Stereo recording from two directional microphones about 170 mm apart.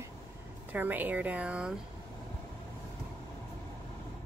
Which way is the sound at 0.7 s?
10° right (ahead or behind).